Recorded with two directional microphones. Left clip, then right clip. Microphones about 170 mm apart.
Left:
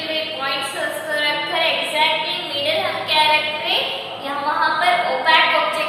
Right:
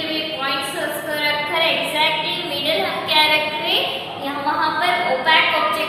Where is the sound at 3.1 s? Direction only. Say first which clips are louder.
Right 1 dB; 10° right (ahead or behind).